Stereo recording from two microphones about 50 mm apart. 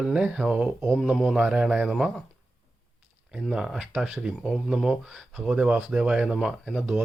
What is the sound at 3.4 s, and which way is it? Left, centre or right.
Speech, centre.